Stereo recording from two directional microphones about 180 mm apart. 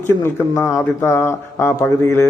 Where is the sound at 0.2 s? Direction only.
15° left (ahead or behind).